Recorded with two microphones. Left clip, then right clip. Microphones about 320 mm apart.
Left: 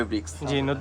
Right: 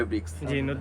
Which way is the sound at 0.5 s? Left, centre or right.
Centre.